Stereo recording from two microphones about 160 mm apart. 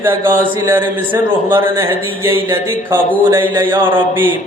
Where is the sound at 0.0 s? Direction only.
15° right (ahead or behind).